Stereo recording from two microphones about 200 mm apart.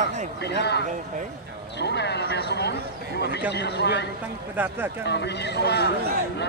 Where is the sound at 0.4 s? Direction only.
55° left (ahead or behind).